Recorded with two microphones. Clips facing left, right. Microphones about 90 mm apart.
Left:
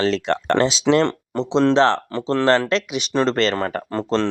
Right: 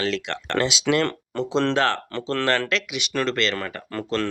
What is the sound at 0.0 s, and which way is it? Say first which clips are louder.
Speech: left 6 dB; 35° left (ahead or behind).